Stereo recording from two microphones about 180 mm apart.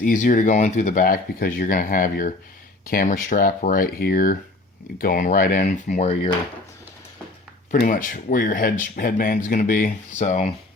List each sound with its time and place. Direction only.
0.0 s speech: 45° left (ahead or behind)
7.8 s speech: 50° left (ahead or behind)